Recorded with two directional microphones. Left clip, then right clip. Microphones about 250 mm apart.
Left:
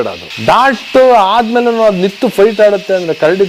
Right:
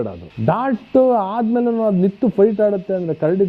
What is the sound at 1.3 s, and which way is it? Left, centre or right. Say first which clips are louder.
Speech: left 9 dB; centre.